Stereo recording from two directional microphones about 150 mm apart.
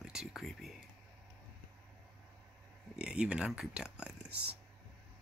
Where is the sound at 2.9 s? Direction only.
5° right (ahead or behind).